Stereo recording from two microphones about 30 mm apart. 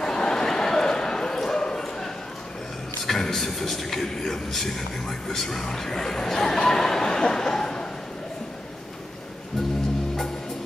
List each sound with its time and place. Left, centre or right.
0.0 s a sound: centre
1.4 s bow-wow: centre
3.0 s a man's voice: centre